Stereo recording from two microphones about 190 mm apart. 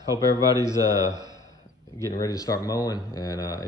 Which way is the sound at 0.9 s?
15° left (ahead or behind).